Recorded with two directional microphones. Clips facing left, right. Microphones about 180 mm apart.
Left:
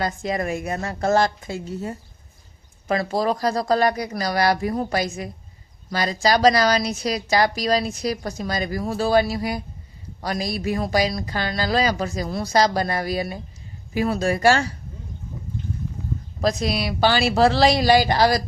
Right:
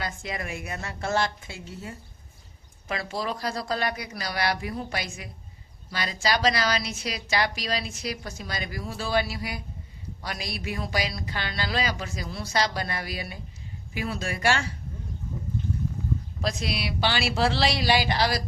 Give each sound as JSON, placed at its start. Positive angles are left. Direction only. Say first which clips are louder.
{"t": 0.0, "sound": "speech", "louder": "left 9 dB", "side_deg": 40}
{"t": 16.4, "sound": "speech", "louder": "left 10 dB", "side_deg": 40}